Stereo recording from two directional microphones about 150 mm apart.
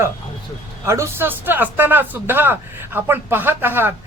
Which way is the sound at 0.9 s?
20° right (ahead or behind).